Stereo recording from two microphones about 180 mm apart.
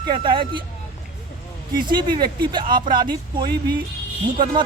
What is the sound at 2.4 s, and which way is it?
Speech, 25° right (ahead or behind).